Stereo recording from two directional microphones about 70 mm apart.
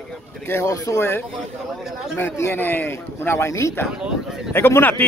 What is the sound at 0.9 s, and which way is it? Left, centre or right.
A man's voice, left.